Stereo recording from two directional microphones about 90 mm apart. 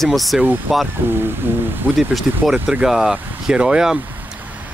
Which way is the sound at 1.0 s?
25° right (ahead or behind).